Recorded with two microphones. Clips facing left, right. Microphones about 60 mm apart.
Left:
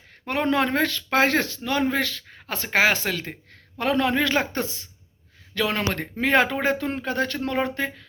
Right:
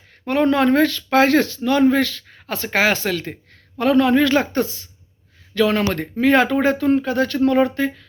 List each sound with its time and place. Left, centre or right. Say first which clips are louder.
0.3 s speech: right 6 dB; centre
7.4 s speech: right 9 dB; centre